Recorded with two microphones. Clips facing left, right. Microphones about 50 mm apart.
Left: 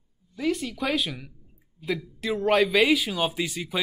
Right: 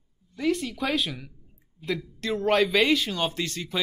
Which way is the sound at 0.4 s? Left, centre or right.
Centre.